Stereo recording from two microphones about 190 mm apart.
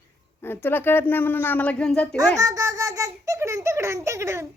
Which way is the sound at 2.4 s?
15° right (ahead or behind).